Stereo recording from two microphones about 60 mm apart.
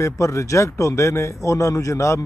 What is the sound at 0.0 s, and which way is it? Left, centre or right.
A man's voice, left.